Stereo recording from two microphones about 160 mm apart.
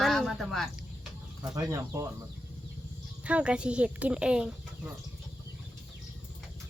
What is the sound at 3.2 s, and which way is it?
Speech, 5° right (ahead or behind).